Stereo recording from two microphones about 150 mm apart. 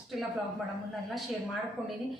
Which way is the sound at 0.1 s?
Centre (ahead or behind).